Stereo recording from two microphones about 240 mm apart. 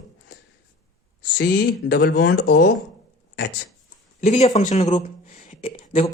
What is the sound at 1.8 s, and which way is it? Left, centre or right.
Speech, left.